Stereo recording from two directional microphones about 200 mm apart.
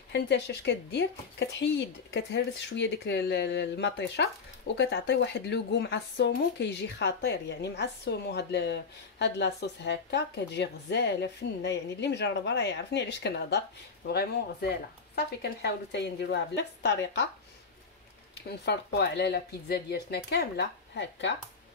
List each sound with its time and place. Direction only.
0.1 s a woman's voice: 60° left (ahead or behind)
18.7 s a woman's voice: 55° left (ahead or behind)